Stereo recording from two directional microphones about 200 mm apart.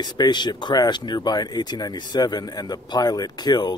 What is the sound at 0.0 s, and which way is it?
Speech, 20° left (ahead or behind).